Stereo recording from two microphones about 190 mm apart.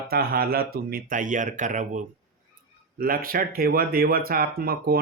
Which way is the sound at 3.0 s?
50° right (ahead or behind).